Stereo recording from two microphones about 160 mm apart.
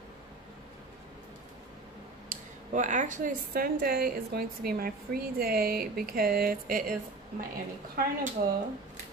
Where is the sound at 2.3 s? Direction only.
50° right (ahead or behind).